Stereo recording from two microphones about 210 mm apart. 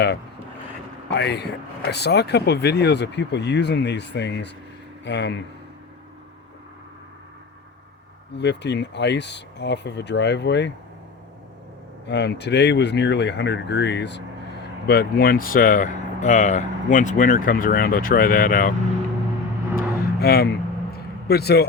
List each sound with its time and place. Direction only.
1.1 s speech: 55° left (ahead or behind)
8.4 s speech: 55° left (ahead or behind)
12.0 s speech: 55° left (ahead or behind)
19.7 s vehicle: 45° left (ahead or behind)